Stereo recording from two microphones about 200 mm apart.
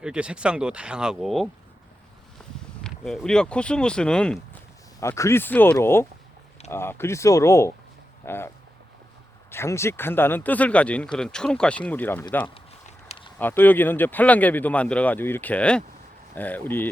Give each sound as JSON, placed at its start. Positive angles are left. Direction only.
{"t": 0.0, "sound": "speech", "side_deg": -5}
{"t": 2.8, "sound": "speech", "side_deg": 0}
{"t": 4.9, "sound": "speech", "side_deg": 15}
{"t": 12.5, "sound": "a sound", "side_deg": 30}
{"t": 13.4, "sound": "speech", "side_deg": 10}